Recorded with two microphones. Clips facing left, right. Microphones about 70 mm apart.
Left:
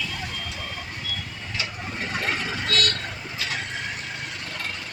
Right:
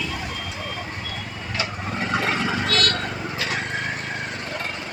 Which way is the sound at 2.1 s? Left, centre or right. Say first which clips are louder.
Right 5 dB; right.